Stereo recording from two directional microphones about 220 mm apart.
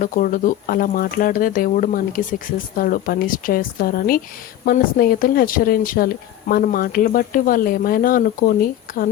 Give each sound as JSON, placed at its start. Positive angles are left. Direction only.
{"t": 0.0, "sound": "speech", "side_deg": 40}